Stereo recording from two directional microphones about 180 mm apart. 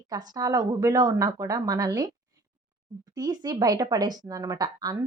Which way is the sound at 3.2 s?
20° right (ahead or behind).